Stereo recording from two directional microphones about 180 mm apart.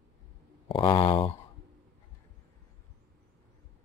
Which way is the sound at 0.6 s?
30° left (ahead or behind).